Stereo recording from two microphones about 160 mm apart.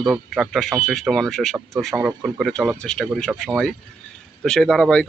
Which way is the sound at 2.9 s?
5° left (ahead or behind).